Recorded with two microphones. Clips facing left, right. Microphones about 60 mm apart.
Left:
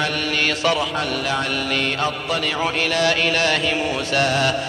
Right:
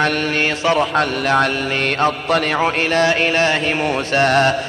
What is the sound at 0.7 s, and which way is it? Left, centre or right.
Speech, right.